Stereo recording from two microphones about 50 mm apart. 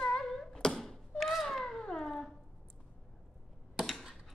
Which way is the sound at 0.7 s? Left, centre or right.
Centre.